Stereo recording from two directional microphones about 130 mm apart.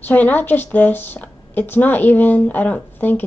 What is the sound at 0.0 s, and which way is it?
A woman's voice, 15° left (ahead or behind).